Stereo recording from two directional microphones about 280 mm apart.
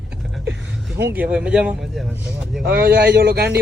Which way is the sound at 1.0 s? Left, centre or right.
Centre.